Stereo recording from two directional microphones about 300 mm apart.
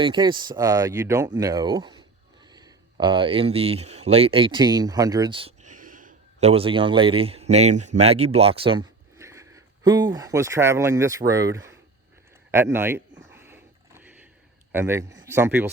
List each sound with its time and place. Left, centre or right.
0.0 s speech: centre
13.3 s a sound: centre
14.7 s speech: centre